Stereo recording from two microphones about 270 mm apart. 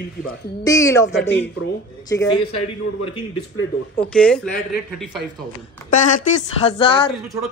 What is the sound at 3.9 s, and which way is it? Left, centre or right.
Speech, centre.